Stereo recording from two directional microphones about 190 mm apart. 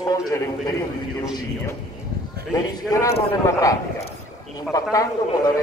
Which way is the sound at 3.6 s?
15° left (ahead or behind).